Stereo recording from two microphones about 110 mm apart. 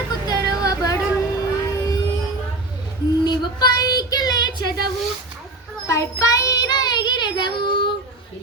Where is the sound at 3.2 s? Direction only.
40° left (ahead or behind).